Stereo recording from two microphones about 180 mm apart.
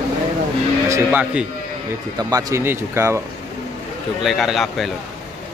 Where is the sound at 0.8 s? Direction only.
15° right (ahead or behind).